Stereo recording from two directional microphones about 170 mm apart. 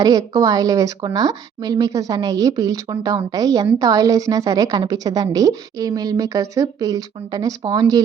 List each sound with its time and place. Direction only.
0.0 s a woman's voice: 20° right (ahead or behind)